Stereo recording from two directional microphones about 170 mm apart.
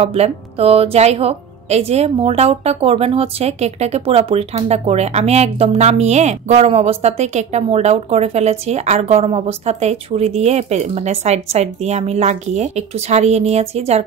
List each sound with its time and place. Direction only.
0.0 s a woman's voice: 35° right (ahead or behind)